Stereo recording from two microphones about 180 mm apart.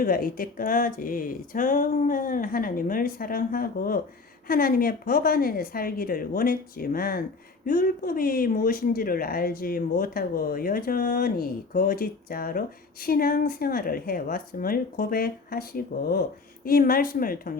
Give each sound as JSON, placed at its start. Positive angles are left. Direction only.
{"t": 0.0, "sound": "a woman's voice", "side_deg": 55}